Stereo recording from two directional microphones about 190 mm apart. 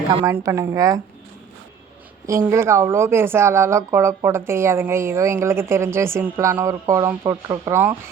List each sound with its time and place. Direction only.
0.3 s speech: 15° right (ahead or behind)
2.2 s speech: 15° right (ahead or behind)